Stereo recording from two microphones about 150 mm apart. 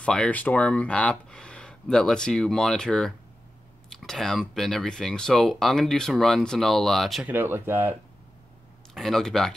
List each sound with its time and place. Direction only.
0.0 s speech: 5° left (ahead or behind)
7.2 s speech: 15° right (ahead or behind)
8.9 s speech: centre (ahead or behind)